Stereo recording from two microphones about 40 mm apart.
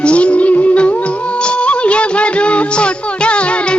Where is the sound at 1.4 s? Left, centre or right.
Left.